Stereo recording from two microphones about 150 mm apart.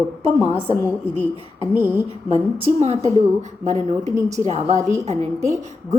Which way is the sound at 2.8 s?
50° right (ahead or behind).